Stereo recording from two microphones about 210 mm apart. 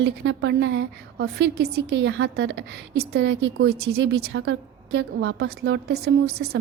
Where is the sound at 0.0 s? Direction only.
55° right (ahead or behind).